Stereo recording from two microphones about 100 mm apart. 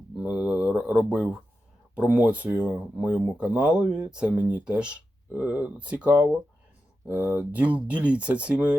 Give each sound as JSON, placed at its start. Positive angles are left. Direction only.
{"t": 0.2, "sound": "speech", "side_deg": -10}